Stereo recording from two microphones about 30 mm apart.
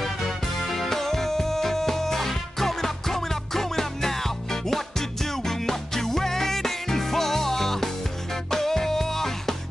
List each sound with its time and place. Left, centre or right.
0.0 s music: centre